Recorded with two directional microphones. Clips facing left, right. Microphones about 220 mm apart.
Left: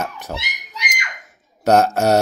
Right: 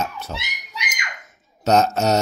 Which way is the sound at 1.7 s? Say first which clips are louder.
Left 3 dB; 10° left (ahead or behind).